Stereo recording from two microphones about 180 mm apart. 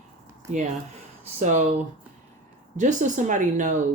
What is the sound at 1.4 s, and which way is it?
Speech, 45° right (ahead or behind).